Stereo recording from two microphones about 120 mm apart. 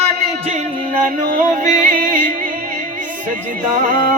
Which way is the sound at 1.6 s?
90° right.